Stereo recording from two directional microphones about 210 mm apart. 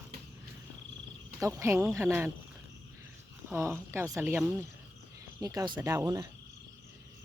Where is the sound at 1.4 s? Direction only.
15° right (ahead or behind).